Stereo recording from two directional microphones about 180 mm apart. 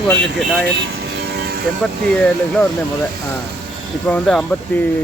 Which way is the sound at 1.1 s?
65° right (ahead or behind).